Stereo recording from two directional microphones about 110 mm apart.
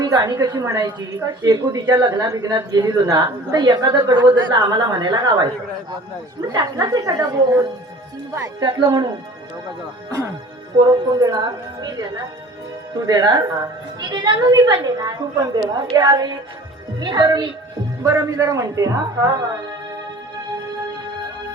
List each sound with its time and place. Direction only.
0.0 s a woman's voice: 35° right (ahead or behind)
6.7 s a woman's voice: 35° right (ahead or behind)
8.6 s a woman's voice: 45° right (ahead or behind)
10.1 s a woman's voice: 25° right (ahead or behind)
12.9 s a woman's voice: 35° right (ahead or behind)
18.0 s a woman's voice: 25° right (ahead or behind)